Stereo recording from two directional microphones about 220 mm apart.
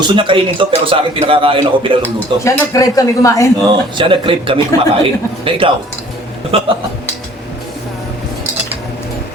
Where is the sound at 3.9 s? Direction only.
25° right (ahead or behind).